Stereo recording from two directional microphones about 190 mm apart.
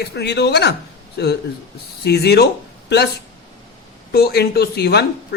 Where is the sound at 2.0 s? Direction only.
60° left (ahead or behind).